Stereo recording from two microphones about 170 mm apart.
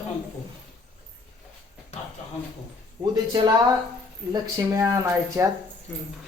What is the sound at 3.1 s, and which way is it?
Speech, 25° right (ahead or behind).